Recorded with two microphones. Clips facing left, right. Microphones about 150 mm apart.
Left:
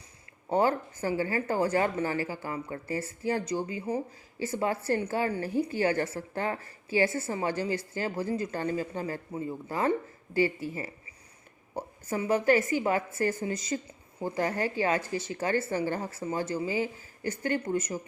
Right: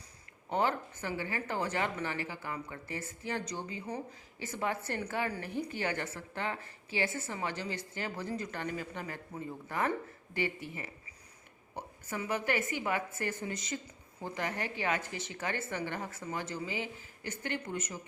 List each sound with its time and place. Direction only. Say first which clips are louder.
0.5 s a woman's voice: left 6 dB; 40° left (ahead or behind)